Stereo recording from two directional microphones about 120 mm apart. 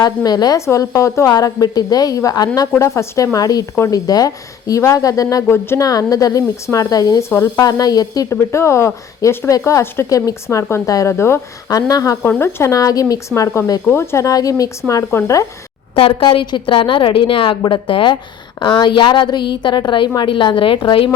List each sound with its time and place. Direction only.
0.0 s a woman's voice: 30° left (ahead or behind)
16.0 s a woman's voice: 50° left (ahead or behind)